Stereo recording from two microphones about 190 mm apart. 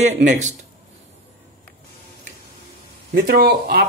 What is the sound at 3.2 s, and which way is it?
Speech, 55° right (ahead or behind).